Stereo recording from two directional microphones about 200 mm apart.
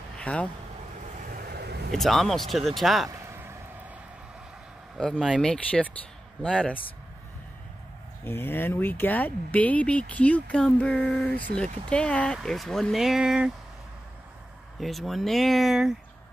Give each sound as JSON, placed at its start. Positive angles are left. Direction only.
{"t": 0.2, "sound": "speech", "side_deg": 5}
{"t": 1.3, "sound": "vehicle", "side_deg": -50}
{"t": 1.9, "sound": "speech", "side_deg": 0}
{"t": 3.1, "sound": "a sound", "side_deg": -10}
{"t": 4.9, "sound": "speech", "side_deg": 0}
{"t": 8.2, "sound": "speech", "side_deg": 10}
{"t": 14.8, "sound": "speech", "side_deg": 0}